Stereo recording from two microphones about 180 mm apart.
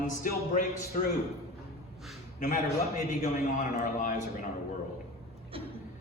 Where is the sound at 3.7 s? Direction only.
50° left (ahead or behind).